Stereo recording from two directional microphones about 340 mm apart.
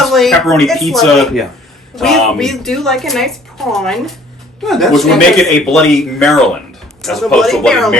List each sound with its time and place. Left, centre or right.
0.0 s speech: centre